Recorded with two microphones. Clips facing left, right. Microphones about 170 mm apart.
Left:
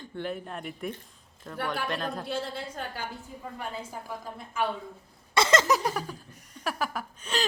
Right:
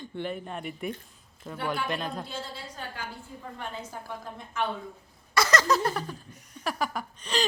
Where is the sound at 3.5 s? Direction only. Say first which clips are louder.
Left 1 dB; 10° left (ahead or behind).